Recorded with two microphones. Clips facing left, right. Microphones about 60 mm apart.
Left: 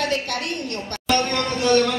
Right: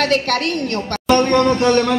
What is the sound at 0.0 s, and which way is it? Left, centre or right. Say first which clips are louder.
Speech: right 7 dB; right.